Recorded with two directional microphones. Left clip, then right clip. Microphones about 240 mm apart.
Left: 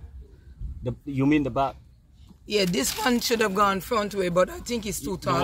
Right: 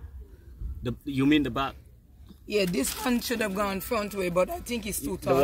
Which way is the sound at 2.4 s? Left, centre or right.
Left.